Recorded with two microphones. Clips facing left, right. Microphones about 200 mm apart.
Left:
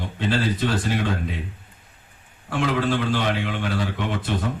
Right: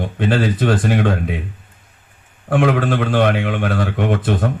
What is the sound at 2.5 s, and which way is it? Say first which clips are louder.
A man's voice: right 6 dB; 55° right (ahead or behind).